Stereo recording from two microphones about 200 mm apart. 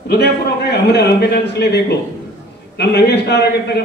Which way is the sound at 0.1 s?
55° left (ahead or behind).